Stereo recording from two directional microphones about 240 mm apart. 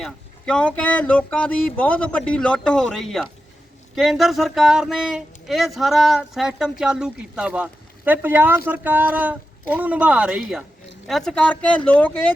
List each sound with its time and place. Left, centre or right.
0.0 s speech: centre